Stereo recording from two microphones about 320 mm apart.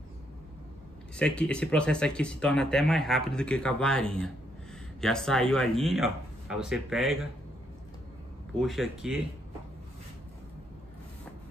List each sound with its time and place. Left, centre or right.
1.1 s speech: centre
8.5 s speech: centre